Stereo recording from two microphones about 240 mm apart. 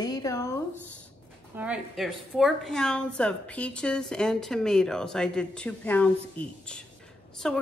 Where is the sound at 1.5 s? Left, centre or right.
Centre.